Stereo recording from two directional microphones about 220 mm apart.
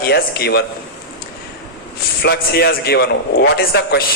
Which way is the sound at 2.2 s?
45° left (ahead or behind).